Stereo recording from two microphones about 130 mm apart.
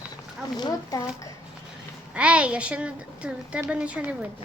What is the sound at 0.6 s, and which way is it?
Speech, 30° left (ahead or behind).